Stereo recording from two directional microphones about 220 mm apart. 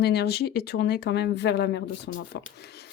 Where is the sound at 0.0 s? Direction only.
45° left (ahead or behind).